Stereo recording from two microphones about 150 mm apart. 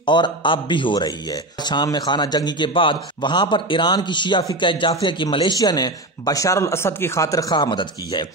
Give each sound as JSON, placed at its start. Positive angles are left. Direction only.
{"t": 0.0, "sound": "a man's voice", "side_deg": 30}